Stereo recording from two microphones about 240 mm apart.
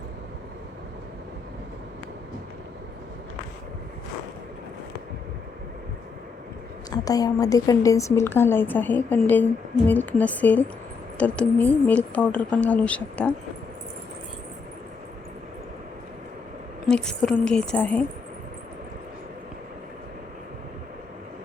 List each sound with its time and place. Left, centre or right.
6.9 s a woman's voice: centre
16.9 s a woman's voice: centre